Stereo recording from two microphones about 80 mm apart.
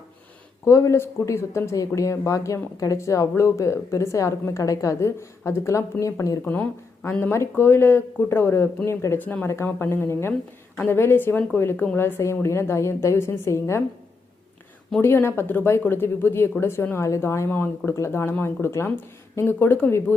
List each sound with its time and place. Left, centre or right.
0.6 s a woman's voice: left
6.4 s speech: left
9.1 s a woman's voice: left
15.0 s a woman's voice: left